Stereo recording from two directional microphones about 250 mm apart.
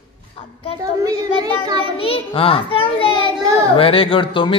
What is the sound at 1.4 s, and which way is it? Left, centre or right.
Speech, centre.